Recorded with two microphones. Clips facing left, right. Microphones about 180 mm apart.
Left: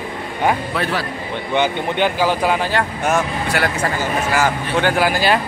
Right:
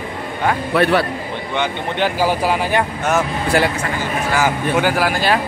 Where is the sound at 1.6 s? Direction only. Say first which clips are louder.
Left 2 dB; centre (ahead or behind).